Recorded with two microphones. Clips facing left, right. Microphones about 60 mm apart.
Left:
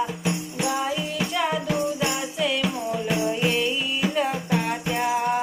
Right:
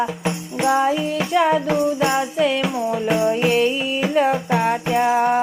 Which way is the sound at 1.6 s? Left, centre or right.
Right.